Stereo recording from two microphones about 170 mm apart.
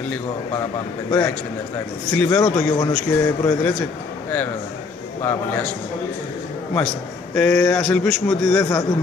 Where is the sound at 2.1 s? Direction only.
10° left (ahead or behind).